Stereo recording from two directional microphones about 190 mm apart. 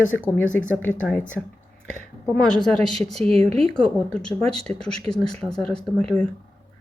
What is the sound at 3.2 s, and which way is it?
Speech, 30° right (ahead or behind).